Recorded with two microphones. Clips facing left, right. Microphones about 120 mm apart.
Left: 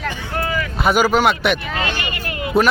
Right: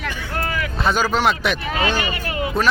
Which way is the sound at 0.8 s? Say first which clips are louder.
Left 4 dB; 10° left (ahead or behind).